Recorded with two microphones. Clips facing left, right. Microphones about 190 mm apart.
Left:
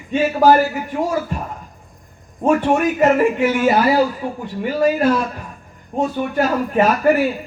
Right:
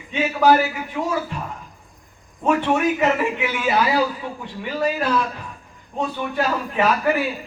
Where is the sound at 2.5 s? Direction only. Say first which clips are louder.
Left 3 dB; 45° left (ahead or behind).